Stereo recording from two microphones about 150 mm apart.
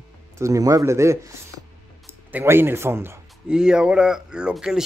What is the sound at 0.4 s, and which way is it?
Speech, 20° right (ahead or behind).